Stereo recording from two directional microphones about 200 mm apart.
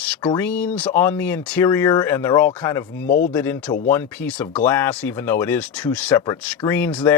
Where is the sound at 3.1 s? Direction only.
45° left (ahead or behind).